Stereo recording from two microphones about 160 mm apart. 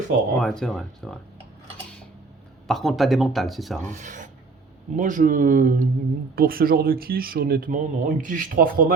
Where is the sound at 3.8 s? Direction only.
50° right (ahead or behind).